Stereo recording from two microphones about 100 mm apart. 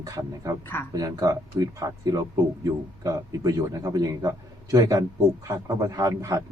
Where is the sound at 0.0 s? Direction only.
35° right (ahead or behind).